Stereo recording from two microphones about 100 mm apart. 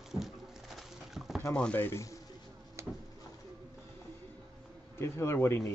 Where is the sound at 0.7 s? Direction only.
Centre (ahead or behind).